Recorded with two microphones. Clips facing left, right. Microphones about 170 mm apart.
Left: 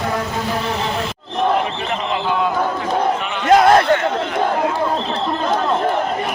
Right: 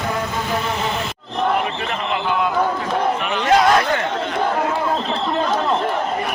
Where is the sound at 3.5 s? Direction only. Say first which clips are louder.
Left 4 dB; 40° left (ahead or behind).